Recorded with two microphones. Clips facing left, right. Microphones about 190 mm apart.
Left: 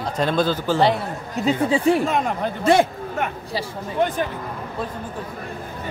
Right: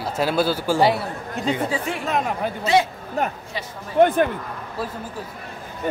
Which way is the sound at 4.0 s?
55° right (ahead or behind).